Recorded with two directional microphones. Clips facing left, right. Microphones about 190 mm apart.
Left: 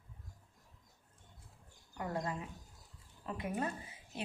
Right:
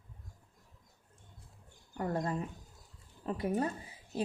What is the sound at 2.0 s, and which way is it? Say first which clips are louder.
A woman's voice: right 5 dB; 40° right (ahead or behind).